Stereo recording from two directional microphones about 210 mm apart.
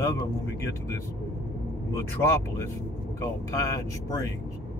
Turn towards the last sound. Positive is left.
turn(degrees=15)  # may be behind; listen again after turning